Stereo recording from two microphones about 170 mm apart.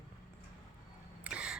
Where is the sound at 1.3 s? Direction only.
5° right (ahead or behind).